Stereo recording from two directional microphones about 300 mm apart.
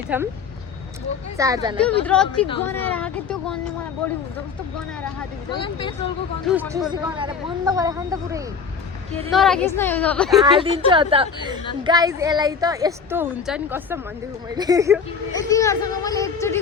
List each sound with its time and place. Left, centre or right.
0.1 s a woman's voice: centre
1.4 s a woman's voice: centre
1.8 s a woman's voice: centre
5.5 s speech: centre
6.5 s a woman's voice: centre
9.3 s a woman's voice: centre
10.4 s a woman's voice: centre
15.4 s speech: centre